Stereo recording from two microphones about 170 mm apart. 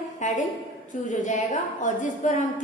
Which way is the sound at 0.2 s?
45° left (ahead or behind).